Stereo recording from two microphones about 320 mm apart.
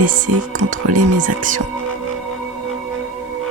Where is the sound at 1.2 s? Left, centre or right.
Right.